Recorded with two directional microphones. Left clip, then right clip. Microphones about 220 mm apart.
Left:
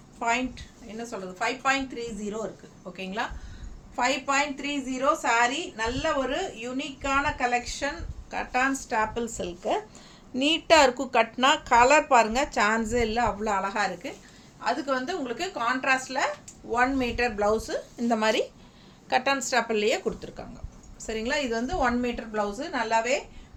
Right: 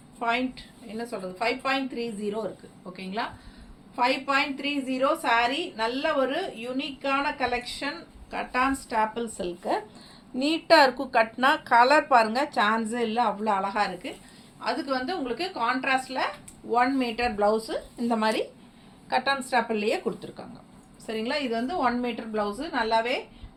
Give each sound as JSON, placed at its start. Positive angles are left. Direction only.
{"t": 0.2, "sound": "a woman's voice", "side_deg": 15}
{"t": 10.3, "sound": "a woman's voice", "side_deg": 25}